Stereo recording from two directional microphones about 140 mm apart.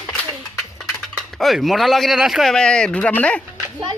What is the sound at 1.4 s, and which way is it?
Speech, centre (ahead or behind).